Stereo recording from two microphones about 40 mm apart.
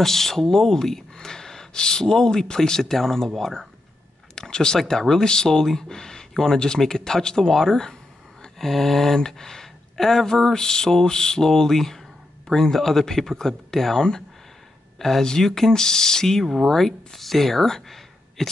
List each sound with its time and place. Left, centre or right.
0.0 s speech: centre